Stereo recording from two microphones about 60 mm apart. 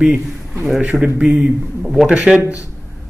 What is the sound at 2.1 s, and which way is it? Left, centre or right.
Speech, centre.